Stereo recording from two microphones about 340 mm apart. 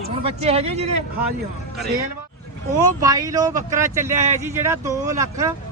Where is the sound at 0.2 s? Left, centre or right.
Centre.